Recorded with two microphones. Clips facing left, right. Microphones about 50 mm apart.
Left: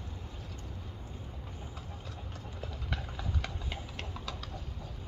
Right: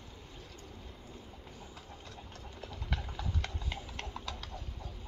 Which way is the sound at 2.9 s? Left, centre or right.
Centre.